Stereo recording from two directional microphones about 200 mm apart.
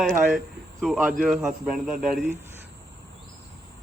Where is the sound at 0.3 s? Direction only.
Centre (ahead or behind).